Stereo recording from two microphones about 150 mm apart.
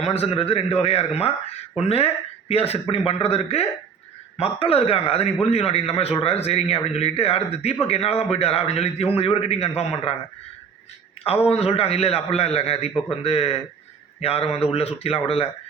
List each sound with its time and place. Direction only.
0.0 s a man's voice: 45° left (ahead or behind)
2.5 s a man's voice: 40° left (ahead or behind)
11.4 s a man's voice: 40° left (ahead or behind)